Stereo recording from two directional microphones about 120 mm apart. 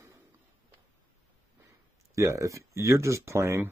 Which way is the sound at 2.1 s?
25° right (ahead or behind).